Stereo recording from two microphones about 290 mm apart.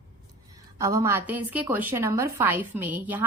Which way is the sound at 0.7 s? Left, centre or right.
Centre.